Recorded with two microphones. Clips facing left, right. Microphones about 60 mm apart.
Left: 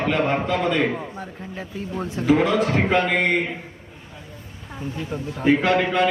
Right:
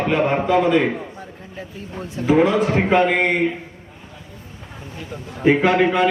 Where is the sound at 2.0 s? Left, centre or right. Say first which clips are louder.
Left 1 dB; left.